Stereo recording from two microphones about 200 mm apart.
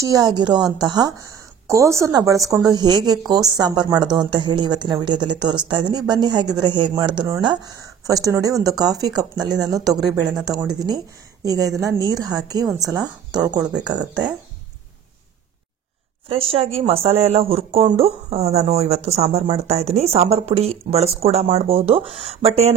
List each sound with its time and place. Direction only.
0.0 s a woman's voice: 20° right (ahead or behind)
9.9 s speech: centre (ahead or behind)
10.4 s a woman's voice: 20° right (ahead or behind)
16.3 s speech: 30° right (ahead or behind)